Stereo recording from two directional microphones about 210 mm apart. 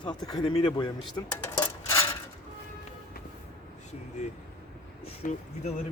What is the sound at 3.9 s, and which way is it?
Speech, 30° left (ahead or behind).